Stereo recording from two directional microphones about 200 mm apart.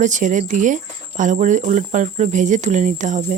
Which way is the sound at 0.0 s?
40° right (ahead or behind).